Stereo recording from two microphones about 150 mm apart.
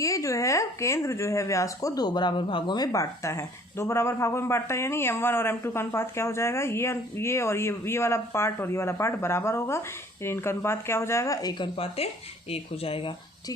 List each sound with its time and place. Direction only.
0.0 s speech: 20° left (ahead or behind); by 13.1 s 40° left (ahead or behind)